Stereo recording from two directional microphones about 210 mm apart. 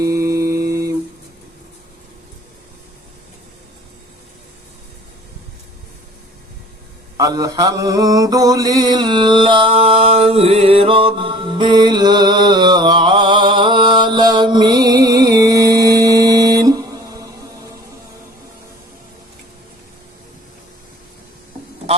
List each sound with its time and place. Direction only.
0.0 s mantra: 15° right (ahead or behind)
7.2 s mantra: 15° right (ahead or behind)